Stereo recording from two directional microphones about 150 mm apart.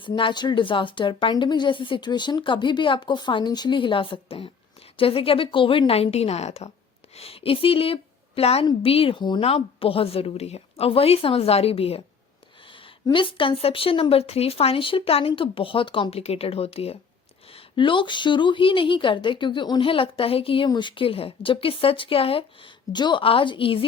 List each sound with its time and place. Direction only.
0.0 s a woman's voice: 35° left (ahead or behind)